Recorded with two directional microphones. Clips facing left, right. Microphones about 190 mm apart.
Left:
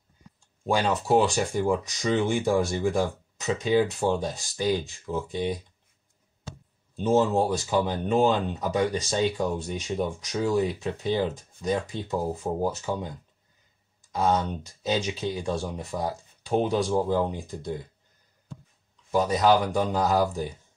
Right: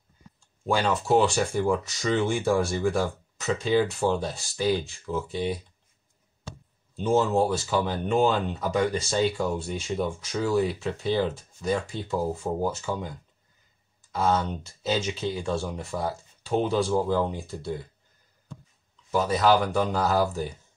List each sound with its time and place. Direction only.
0.7 s speech: 15° left (ahead or behind)
7.0 s speech: 15° left (ahead or behind)
14.1 s speech: 15° left (ahead or behind)
19.1 s speech: 15° left (ahead or behind)